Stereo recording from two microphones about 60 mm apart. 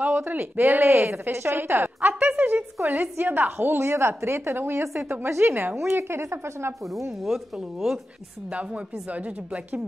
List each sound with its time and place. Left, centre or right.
0.0 s speech: right
7.1 s a woman's voice: centre
8.5 s speech: centre